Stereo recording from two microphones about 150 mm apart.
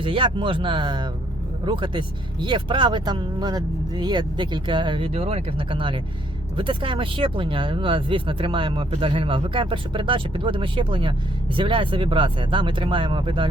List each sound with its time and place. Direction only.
0.0 s speech: 35° right (ahead or behind)